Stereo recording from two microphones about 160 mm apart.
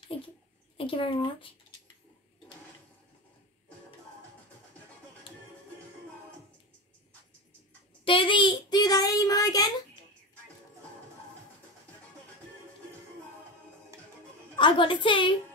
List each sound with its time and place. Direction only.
0.7 s speech: 35° left (ahead or behind)
8.0 s child singing: 35° left (ahead or behind)
14.5 s a woman's voice: 30° left (ahead or behind)